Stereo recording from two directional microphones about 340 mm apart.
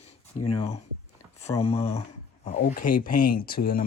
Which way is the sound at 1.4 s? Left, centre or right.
Centre.